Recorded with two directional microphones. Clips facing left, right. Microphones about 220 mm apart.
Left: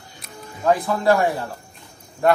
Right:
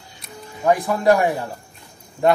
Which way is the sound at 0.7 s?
15° right (ahead or behind).